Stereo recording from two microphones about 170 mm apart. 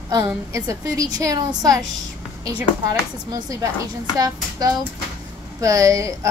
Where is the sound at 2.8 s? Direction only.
20° right (ahead or behind).